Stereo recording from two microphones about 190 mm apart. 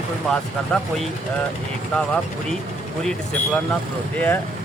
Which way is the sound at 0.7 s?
5° left (ahead or behind).